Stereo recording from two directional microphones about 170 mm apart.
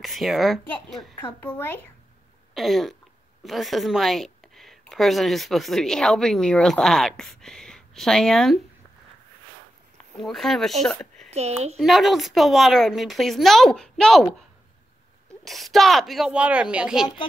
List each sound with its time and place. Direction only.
0.0 s speech: centre (ahead or behind)
2.5 s speech: centre (ahead or behind)
10.1 s speech: centre (ahead or behind)
11.2 s a child's voice: 40° right (ahead or behind)
11.7 s speech: centre (ahead or behind)
15.4 s speech: centre (ahead or behind)